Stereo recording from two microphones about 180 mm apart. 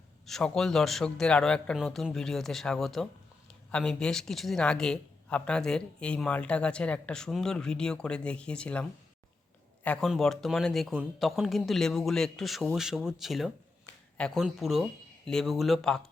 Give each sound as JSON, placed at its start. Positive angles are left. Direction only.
{"t": 0.3, "sound": "speech", "side_deg": 5}